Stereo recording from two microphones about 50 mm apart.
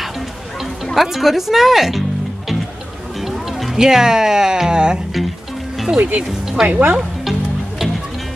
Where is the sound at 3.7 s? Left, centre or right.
Centre.